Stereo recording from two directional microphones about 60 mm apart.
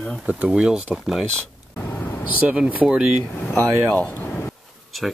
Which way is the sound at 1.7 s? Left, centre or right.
Left.